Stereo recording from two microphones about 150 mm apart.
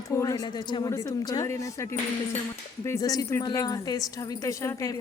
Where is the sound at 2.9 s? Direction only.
25° left (ahead or behind).